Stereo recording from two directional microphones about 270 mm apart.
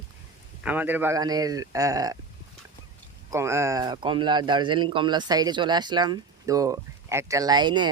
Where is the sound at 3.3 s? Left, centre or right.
Centre.